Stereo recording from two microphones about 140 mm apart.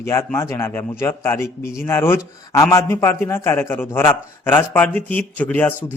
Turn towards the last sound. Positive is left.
turn(degrees=10)  # may be behind; listen again after turning